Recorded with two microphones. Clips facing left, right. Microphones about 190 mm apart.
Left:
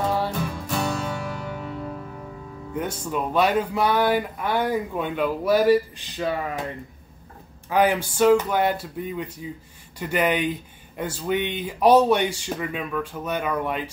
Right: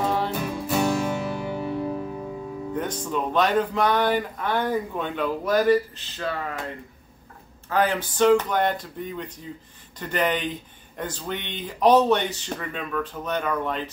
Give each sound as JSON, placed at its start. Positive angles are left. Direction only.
{"t": 0.3, "sound": "music", "side_deg": -5}
{"t": 1.0, "sound": "music", "side_deg": -20}
{"t": 2.7, "sound": "speech", "side_deg": 10}
{"t": 7.7, "sound": "speech", "side_deg": 10}